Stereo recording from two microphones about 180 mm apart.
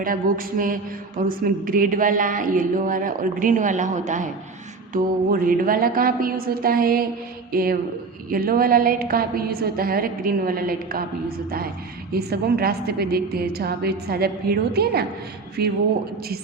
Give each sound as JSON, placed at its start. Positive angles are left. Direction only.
{"t": 0.0, "sound": "a woman's voice", "side_deg": -50}